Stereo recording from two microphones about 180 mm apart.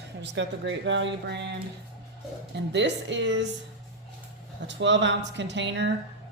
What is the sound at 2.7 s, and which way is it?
Speech, 80° right.